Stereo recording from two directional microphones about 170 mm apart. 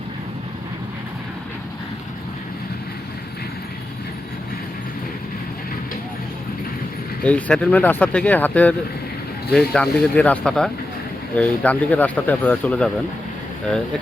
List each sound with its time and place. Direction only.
7.3 s speech: 10° left (ahead or behind)